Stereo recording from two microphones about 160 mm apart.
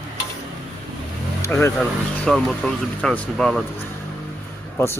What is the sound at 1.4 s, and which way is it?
Speech, 15° left (ahead or behind).